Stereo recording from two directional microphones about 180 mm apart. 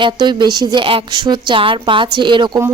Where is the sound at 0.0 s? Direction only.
25° right (ahead or behind).